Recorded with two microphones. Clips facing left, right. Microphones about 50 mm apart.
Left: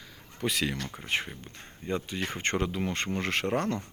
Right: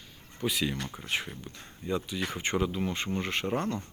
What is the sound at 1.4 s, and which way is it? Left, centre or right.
Speech, left.